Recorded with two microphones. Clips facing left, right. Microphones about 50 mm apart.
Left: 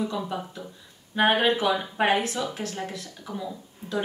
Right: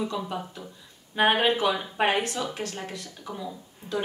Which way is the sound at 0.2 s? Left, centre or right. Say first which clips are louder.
Left 1 dB; centre.